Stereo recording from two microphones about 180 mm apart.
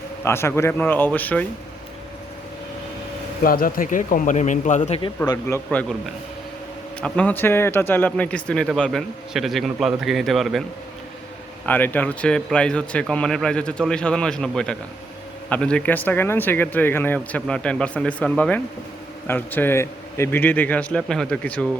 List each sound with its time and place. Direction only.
0.3 s speech: 15° left (ahead or behind)
3.4 s a man's voice: 50° left (ahead or behind)
4.8 s speech: 25° left (ahead or behind)
7.0 s a man's voice: 10° left (ahead or behind)
11.6 s a man's voice: 10° left (ahead or behind)